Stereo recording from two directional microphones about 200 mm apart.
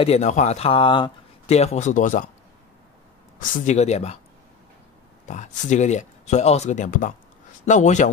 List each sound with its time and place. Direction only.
0.0 s speech: 35° left (ahead or behind)
3.3 s speech: 40° left (ahead or behind)
5.3 s speech: 35° left (ahead or behind)